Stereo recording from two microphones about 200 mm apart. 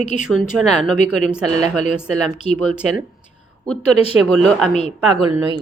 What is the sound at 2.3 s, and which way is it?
Speech, 35° left (ahead or behind).